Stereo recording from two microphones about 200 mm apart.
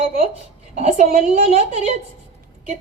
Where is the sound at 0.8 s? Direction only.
30° right (ahead or behind).